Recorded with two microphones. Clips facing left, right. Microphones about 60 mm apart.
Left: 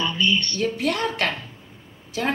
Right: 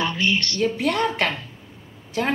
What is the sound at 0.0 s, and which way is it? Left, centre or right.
Speech, right.